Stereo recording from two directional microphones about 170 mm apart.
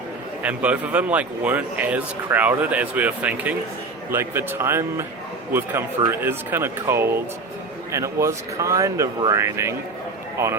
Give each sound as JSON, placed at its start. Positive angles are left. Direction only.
{"t": 0.4, "sound": "speech", "side_deg": -10}